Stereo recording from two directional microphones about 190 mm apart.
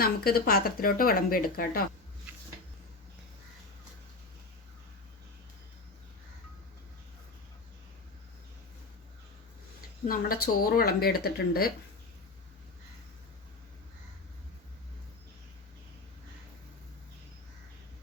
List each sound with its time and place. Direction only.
0.0 s speech: 55° left (ahead or behind)
10.1 s speech: 50° left (ahead or behind)